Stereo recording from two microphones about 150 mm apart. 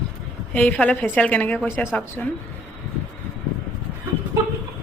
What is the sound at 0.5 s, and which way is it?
A woman's voice, 10° left (ahead or behind).